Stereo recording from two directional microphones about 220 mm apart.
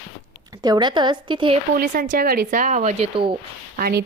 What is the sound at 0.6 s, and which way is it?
Speech, 20° right (ahead or behind).